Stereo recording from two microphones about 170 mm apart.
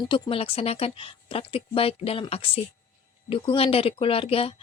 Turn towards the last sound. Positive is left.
turn(degrees=35)  # may be behind; listen again after turning